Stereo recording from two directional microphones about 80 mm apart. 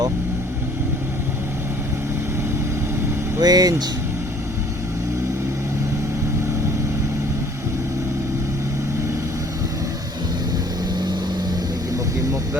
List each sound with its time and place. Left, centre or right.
3.4 s speech: right